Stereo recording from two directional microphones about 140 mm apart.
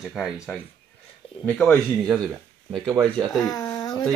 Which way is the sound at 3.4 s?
30° left (ahead or behind).